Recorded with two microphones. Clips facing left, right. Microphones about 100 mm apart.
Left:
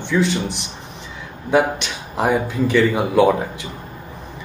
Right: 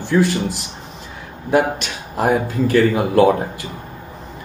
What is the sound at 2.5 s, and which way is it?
Speech, 80° left.